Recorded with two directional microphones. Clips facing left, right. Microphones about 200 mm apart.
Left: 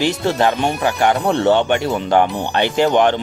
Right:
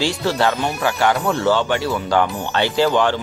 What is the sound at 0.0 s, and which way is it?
Speech, 20° left (ahead or behind).